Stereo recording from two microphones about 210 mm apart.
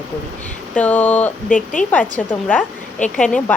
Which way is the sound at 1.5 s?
40° left (ahead or behind).